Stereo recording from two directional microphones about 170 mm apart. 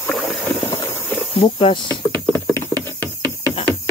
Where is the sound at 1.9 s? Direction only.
10° left (ahead or behind).